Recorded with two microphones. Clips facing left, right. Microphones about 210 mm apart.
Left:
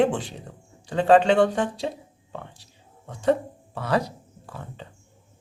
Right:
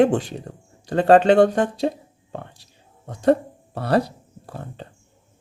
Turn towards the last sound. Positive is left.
turn(degrees=-45)  # may be behind; listen again after turning